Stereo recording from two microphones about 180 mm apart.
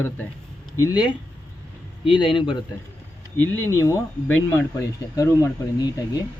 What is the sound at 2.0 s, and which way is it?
Speech, 30° left (ahead or behind).